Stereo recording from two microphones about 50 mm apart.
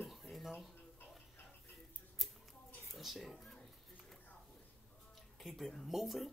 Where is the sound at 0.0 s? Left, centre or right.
Centre.